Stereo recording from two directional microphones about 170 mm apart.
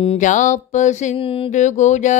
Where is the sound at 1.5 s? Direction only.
45° left (ahead or behind).